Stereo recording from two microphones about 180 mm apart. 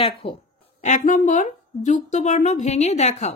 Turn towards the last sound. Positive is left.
turn(degrees=40)  # may be behind; listen again after turning